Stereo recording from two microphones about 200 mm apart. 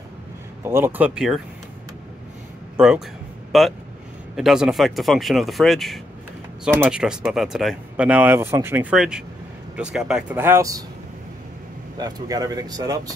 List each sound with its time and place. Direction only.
0.7 s speech: 10° right (ahead or behind)
3.5 s speech: centre (ahead or behind)
12.0 s speech: 20° right (ahead or behind)